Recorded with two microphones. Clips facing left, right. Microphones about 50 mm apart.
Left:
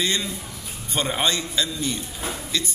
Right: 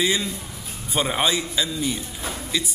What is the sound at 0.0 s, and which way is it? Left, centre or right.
A man's voice, centre.